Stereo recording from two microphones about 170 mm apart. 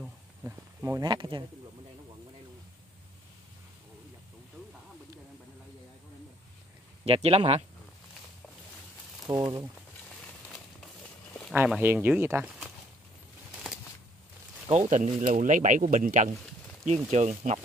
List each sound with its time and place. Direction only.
0.5 s speech: 15° right (ahead or behind)
7.1 s speech: 35° right (ahead or behind)
9.3 s speech: 20° right (ahead or behind)
11.5 s speech: 10° right (ahead or behind)
15.0 s speech: 50° right (ahead or behind)